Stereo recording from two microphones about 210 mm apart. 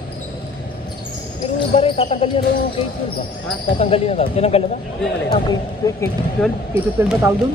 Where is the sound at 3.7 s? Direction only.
30° left (ahead or behind).